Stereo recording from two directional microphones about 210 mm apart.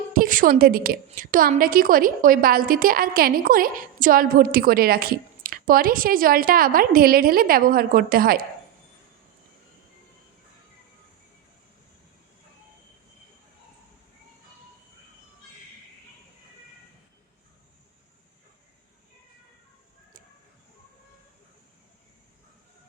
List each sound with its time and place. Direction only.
0.1 s a woman's voice: 40° right (ahead or behind)